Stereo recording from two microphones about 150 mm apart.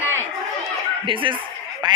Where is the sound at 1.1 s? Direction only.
35° right (ahead or behind).